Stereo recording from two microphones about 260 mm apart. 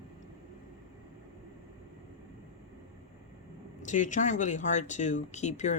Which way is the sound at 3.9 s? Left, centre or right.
Left.